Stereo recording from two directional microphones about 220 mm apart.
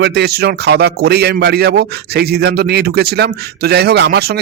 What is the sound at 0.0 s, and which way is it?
Speech, 50° right (ahead or behind).